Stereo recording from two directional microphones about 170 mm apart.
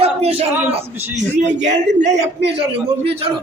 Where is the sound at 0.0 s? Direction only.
35° right (ahead or behind).